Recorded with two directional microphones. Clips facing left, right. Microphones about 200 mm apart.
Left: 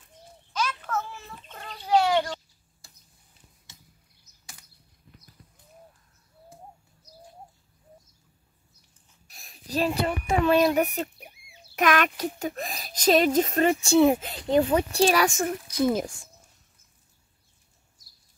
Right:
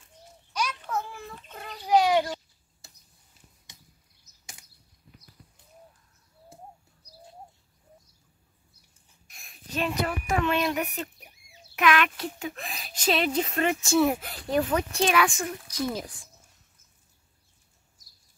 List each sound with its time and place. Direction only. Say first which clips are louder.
0.5 s a sound: left 1 dB; 10° right (ahead or behind)
9.3 s a child's voice: left 5 dB; 35° left (ahead or behind)
13.8 s a child's voice: left 4 dB; 25° left (ahead or behind); by 16.3 s 45° left (ahead or behind)